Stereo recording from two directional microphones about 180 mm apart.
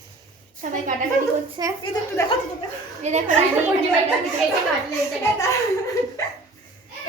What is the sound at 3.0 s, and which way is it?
Speech, 40° right (ahead or behind).